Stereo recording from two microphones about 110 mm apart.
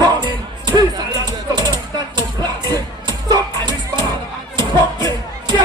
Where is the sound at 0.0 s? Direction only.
40° right (ahead or behind).